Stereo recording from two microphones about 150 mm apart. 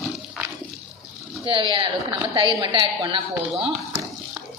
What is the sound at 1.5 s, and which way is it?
Speech, 35° right (ahead or behind).